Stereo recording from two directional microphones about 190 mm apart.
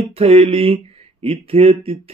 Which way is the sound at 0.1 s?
30° right (ahead or behind).